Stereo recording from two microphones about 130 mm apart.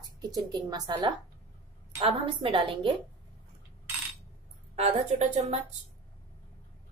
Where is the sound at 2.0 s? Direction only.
50° right (ahead or behind).